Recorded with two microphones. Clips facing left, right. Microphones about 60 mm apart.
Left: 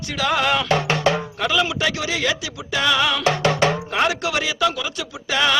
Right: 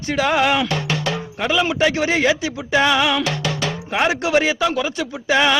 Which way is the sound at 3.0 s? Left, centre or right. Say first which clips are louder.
Right 2 dB; centre.